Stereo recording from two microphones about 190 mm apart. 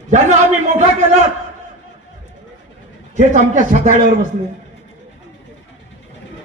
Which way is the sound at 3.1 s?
40° right (ahead or behind).